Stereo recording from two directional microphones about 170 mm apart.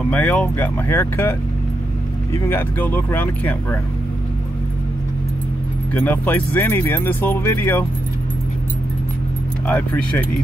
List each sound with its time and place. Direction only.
0.1 s speech: 5° left (ahead or behind)
2.3 s speech: 15° left (ahead or behind)
5.9 s speech: 10° left (ahead or behind)
9.7 s speech: 10° left (ahead or behind)